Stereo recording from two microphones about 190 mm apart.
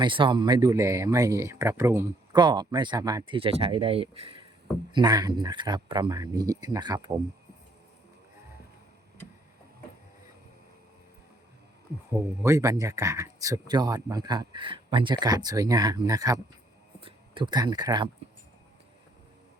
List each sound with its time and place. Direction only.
0.0 s speech: 25° right (ahead or behind)
12.4 s speech: 15° right (ahead or behind)